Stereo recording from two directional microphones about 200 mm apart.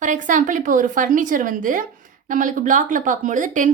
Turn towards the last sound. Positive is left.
turn(degrees=-40)  # may be behind; listen again after turning